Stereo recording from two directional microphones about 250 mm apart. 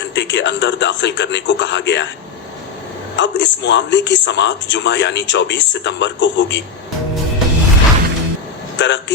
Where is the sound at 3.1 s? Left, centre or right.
Left.